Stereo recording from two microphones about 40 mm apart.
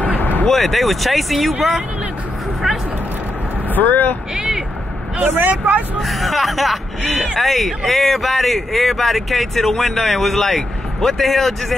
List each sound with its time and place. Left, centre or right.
0.2 s a sound: left
0.5 s speech: centre
3.7 s speech: left
5.2 s speech: right
5.9 s speech: centre